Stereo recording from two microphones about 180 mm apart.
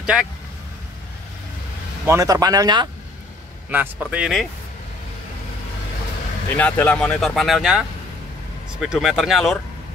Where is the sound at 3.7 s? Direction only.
10° right (ahead or behind).